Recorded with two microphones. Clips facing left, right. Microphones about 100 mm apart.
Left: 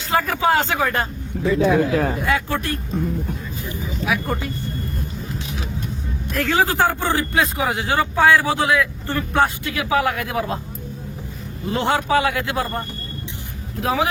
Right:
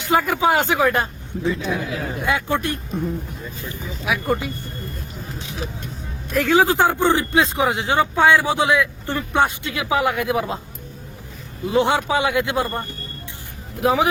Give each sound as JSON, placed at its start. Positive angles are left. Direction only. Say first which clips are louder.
{"t": 0.0, "sound": "speech", "louder": "right 1 dB", "side_deg": -15}
{"t": 1.6, "sound": "speech", "louder": "left 8 dB", "side_deg": 55}
{"t": 2.2, "sound": "speech", "louder": "even", "side_deg": -20}
{"t": 3.6, "sound": "speech", "louder": "left 2 dB", "side_deg": 20}
{"t": 4.0, "sound": "speech", "louder": "right 2 dB", "side_deg": -10}
{"t": 6.3, "sound": "speech", "louder": "right 3 dB", "side_deg": -15}
{"t": 11.7, "sound": "speech", "louder": "right 1 dB", "side_deg": -10}
{"t": 13.8, "sound": "speech", "louder": "right 3 dB", "side_deg": -20}